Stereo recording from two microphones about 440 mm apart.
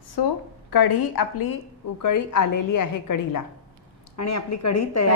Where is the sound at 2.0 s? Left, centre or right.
Left.